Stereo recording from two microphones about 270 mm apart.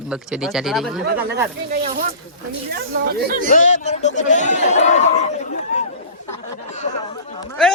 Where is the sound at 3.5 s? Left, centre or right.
Left.